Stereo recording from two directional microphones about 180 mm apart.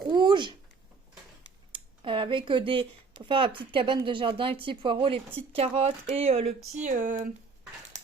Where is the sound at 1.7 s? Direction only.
30° right (ahead or behind); by 7.2 s 45° right (ahead or behind).